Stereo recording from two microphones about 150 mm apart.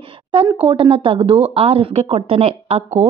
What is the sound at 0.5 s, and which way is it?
Speech, 25° right (ahead or behind).